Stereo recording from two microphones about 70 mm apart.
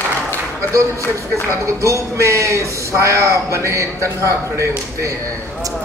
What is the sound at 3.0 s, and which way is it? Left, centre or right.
Speech, right.